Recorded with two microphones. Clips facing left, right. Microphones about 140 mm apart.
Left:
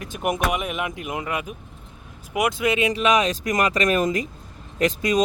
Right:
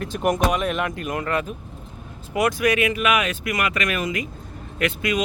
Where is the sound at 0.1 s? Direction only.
5° left (ahead or behind).